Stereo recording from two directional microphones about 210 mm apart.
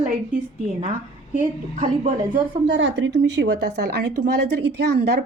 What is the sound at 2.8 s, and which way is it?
Speech, 60° right (ahead or behind).